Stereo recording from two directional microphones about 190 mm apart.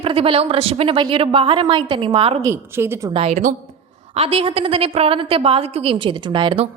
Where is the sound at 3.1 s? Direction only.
30° right (ahead or behind).